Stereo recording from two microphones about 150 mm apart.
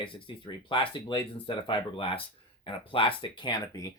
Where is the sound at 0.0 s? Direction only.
35° left (ahead or behind).